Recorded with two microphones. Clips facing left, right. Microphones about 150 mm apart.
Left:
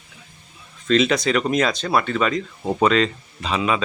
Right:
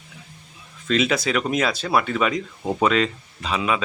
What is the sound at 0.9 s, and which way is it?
Speech, 5° right (ahead or behind).